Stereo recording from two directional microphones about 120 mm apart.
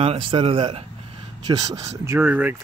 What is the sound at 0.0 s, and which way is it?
Speech, 50° right (ahead or behind).